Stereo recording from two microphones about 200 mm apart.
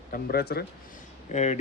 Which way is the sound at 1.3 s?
35° left (ahead or behind).